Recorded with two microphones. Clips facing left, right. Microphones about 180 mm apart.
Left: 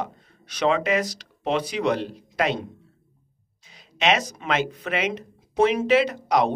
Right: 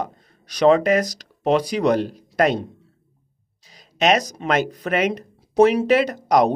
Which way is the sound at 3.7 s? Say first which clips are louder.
Right 4 dB; 40° right (ahead or behind).